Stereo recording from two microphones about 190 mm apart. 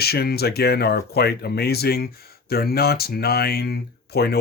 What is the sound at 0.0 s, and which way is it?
Speech, 55° left (ahead or behind).